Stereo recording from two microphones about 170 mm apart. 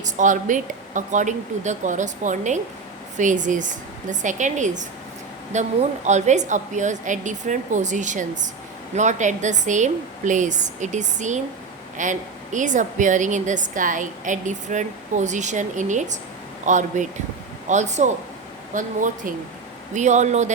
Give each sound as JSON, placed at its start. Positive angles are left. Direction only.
{"t": 0.0, "sound": "a woman's voice", "side_deg": -45}